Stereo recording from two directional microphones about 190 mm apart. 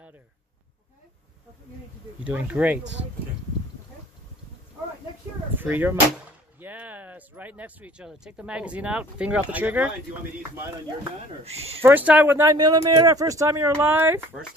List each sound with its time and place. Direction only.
2.2 s speech: 5° right (ahead or behind)
5.6 s speech: 10° right (ahead or behind)
11.4 s speech: 30° right (ahead or behind)
11.8 s speech: 10° right (ahead or behind)